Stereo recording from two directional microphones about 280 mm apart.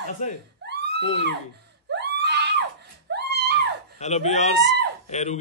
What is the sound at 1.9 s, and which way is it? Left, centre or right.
Screaming, right.